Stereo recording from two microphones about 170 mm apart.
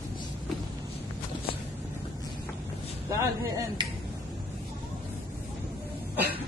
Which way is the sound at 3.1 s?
20° right (ahead or behind).